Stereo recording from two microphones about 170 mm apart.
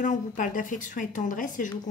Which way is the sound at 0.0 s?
50° left (ahead or behind).